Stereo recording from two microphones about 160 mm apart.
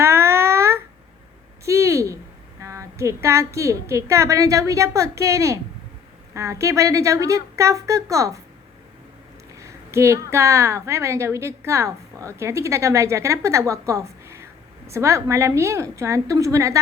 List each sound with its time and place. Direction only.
0.0 s a sound: 15° right (ahead or behind)
2.6 s a woman's voice: 20° right (ahead or behind)
9.6 s a woman's voice: 20° right (ahead or behind)